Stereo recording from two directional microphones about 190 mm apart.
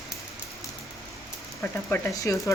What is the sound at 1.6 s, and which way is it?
Speech, 15° left (ahead or behind).